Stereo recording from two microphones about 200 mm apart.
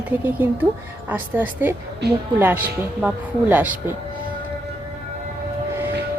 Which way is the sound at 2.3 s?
10° right (ahead or behind).